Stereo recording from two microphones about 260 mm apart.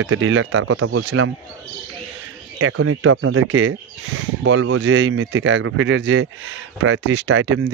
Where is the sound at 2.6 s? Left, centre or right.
Right.